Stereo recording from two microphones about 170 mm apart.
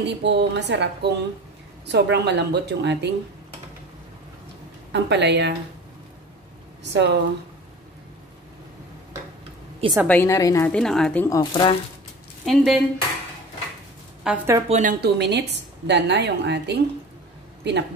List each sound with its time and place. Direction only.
0.0 s a woman's voice: 90° right
4.9 s a woman's voice: 90° right
6.8 s speech: 90° right
10.0 s a woman's voice: 15° left (ahead or behind)
10.7 s speech: 5° left (ahead or behind)
11.2 s speech: 25° left (ahead or behind)
12.4 s speech: centre (ahead or behind)
14.2 s a woman's voice: 10° right (ahead or behind)
14.7 s a woman's voice: 50° right (ahead or behind)
15.0 s a woman's voice: 75° right (ahead or behind)